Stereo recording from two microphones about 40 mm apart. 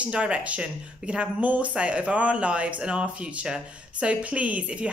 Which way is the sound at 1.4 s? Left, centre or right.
Right.